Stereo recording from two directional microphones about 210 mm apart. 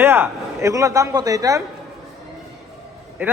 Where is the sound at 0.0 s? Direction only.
10° right (ahead or behind).